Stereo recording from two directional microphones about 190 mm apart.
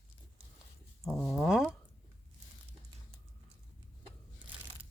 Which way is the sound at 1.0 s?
Centre (ahead or behind).